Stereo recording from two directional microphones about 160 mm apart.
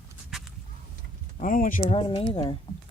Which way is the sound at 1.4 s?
55° left (ahead or behind).